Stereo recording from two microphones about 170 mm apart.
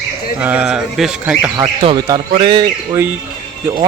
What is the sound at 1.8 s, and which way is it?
Speech, 30° right (ahead or behind).